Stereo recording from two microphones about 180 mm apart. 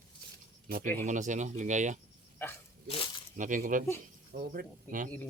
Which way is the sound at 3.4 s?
45° right (ahead or behind).